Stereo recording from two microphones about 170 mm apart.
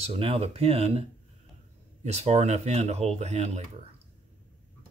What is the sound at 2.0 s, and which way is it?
Speech, 40° right (ahead or behind).